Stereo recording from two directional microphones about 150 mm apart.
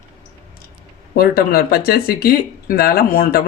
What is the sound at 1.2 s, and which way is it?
Speech, 85° left.